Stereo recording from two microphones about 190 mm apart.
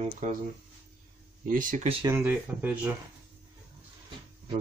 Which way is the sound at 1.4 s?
45° right (ahead or behind).